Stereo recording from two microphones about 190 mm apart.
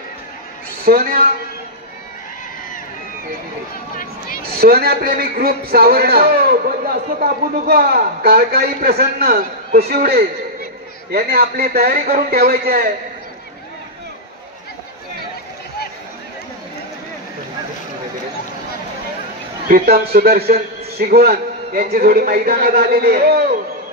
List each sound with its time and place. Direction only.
0.8 s a man's voice: 50° right (ahead or behind)
4.5 s a man's voice: 55° right (ahead or behind)
19.7 s a man's voice: 55° right (ahead or behind)